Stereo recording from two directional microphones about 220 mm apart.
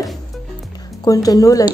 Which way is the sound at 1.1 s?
15° left (ahead or behind).